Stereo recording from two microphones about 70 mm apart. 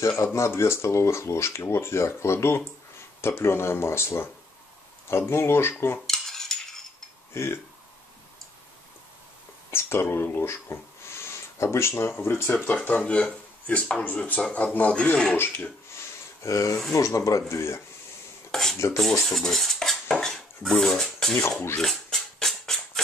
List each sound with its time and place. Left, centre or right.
0.2 s speech: left
6.0 s cutlery: centre
7.3 s speech: left
9.7 s speech: left
12.8 s speech: left
15.3 s speech: left
16.4 s speech: left
18.5 s dishes: centre
18.9 s cutlery: centre
21.8 s a sound: centre